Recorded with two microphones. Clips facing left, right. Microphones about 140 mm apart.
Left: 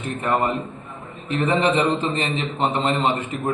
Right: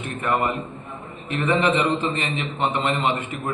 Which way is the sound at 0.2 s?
30° left (ahead or behind).